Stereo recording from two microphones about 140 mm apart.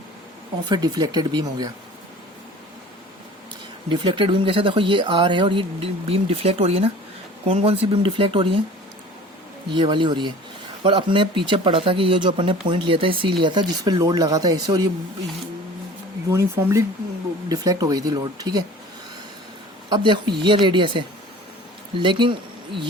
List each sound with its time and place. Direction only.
0.7 s speech: 30° right (ahead or behind)
3.8 s speech: 35° right (ahead or behind)
9.7 s speech: 35° right (ahead or behind)
16.3 s speech: 20° right (ahead or behind)
19.9 s speech: 35° right (ahead or behind)